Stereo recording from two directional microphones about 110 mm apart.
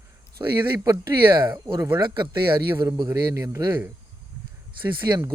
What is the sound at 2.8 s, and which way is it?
Speech, 30° right (ahead or behind).